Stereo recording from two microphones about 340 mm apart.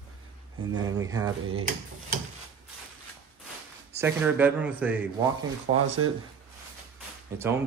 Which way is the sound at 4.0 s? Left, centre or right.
Centre.